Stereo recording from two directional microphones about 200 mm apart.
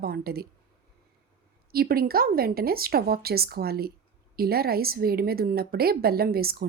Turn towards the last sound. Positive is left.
turn(degrees=-50)  # may be behind; listen again after turning